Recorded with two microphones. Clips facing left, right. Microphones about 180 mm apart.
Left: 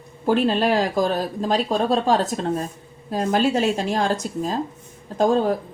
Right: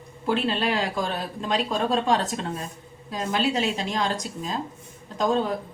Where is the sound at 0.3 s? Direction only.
45° left (ahead or behind).